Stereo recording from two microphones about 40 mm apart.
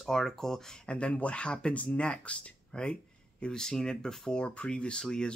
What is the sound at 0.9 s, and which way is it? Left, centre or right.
Speech, left.